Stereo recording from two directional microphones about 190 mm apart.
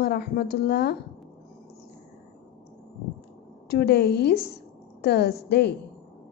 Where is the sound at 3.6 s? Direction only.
60° left (ahead or behind).